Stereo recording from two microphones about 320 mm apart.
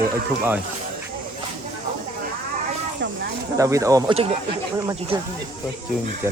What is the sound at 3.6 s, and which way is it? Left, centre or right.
Speech, centre.